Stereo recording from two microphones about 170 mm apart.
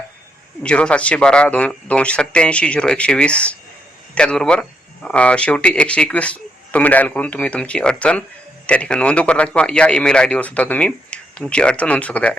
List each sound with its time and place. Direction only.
0.6 s a man's voice: 5° left (ahead or behind)